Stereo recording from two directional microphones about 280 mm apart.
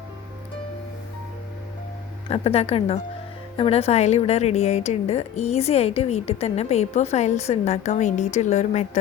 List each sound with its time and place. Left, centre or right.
2.3 s speech: left